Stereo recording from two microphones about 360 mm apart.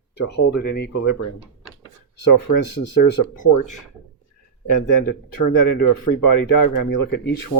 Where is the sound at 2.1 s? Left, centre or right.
Left.